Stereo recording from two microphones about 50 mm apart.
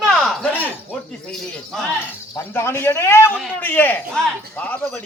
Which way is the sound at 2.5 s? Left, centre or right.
Left.